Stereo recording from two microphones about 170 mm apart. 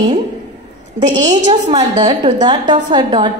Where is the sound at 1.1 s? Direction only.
45° right (ahead or behind).